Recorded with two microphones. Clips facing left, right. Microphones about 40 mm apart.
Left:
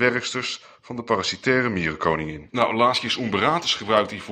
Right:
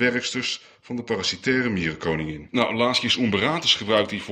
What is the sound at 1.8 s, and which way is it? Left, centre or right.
Speech, left.